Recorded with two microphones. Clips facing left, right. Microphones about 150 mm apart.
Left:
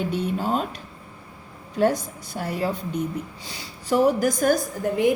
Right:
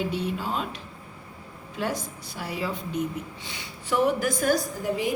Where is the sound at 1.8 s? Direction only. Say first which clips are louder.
Left 9 dB; 45° left (ahead or behind).